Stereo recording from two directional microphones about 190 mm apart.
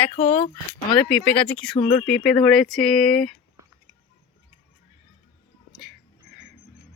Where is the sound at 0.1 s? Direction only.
30° left (ahead or behind).